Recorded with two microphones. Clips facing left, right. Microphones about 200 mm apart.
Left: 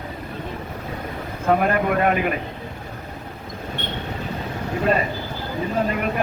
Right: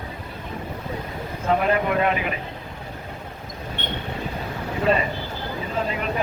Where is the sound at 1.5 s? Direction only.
50° left (ahead or behind).